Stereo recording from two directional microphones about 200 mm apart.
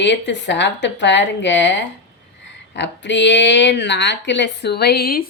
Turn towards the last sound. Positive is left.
turn(degrees=50)  # may be behind; listen again after turning